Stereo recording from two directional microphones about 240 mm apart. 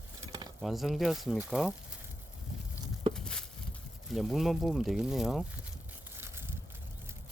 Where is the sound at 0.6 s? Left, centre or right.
Centre.